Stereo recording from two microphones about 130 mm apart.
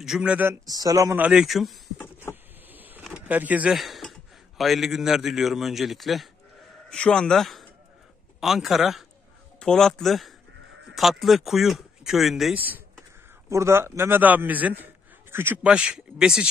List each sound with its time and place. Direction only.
0.0 s speech: 5° right (ahead or behind)
0.5 s speech: 30° right (ahead or behind)
1.1 s speech: 10° right (ahead or behind)
2.7 s a sound: 15° right (ahead or behind)
3.1 s speech: 10° right (ahead or behind)
3.7 s a man's voice: centre (ahead or behind)
12.5 s a man's voice: 15° right (ahead or behind)